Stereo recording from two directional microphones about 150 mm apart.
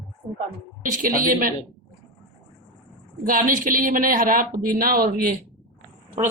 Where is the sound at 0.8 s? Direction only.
65° right (ahead or behind).